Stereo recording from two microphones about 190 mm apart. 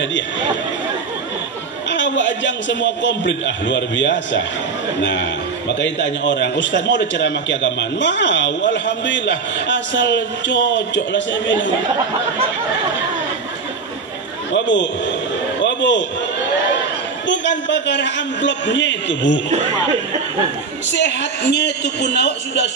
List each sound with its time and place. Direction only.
1.9 s a man's voice: 70° left (ahead or behind)
5.7 s a man's voice: 70° left (ahead or behind)
14.5 s a man's voice: 70° left (ahead or behind)
15.6 s a sound: 70° left (ahead or behind)
17.3 s a man's voice: 70° left (ahead or behind)
20.9 s a man's voice: 70° left (ahead or behind)